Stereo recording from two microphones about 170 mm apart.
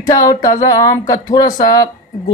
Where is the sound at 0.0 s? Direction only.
20° left (ahead or behind).